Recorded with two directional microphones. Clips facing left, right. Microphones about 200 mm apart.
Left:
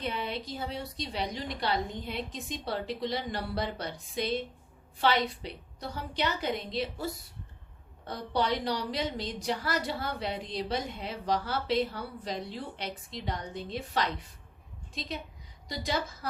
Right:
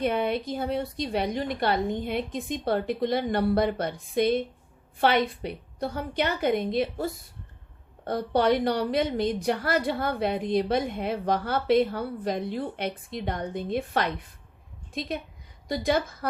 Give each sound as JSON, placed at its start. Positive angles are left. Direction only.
{"t": 0.0, "sound": "a woman's voice", "side_deg": -55}
{"t": 15.7, "sound": "a woman's voice", "side_deg": -55}